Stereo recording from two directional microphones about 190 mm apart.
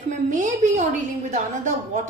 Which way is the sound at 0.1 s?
40° right (ahead or behind).